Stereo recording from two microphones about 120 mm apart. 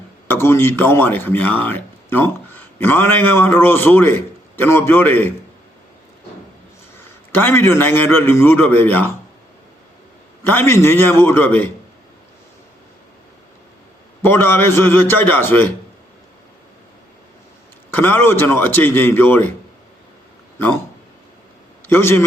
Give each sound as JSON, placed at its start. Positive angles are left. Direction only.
{"t": 0.3, "sound": "speech", "side_deg": 20}
{"t": 7.3, "sound": "speech", "side_deg": 20}
{"t": 10.4, "sound": "speech", "side_deg": 15}
{"t": 14.2, "sound": "a man's voice", "side_deg": 20}
{"t": 17.9, "sound": "speech", "side_deg": 15}
{"t": 21.8, "sound": "a man's voice", "side_deg": 20}